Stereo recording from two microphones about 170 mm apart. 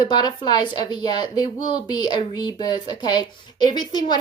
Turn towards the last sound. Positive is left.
turn(degrees=25)  # may be behind; listen again after turning